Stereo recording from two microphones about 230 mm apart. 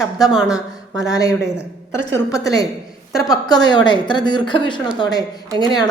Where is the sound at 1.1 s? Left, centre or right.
Centre.